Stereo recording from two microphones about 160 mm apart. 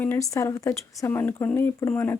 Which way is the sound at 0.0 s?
15° left (ahead or behind).